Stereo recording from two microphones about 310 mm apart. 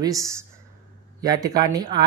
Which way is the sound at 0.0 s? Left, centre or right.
Centre.